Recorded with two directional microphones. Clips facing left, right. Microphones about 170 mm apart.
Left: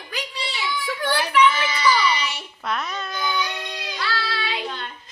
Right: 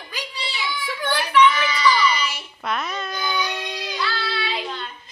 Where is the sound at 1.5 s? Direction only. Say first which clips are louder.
Right 1 dB; 20° left (ahead or behind).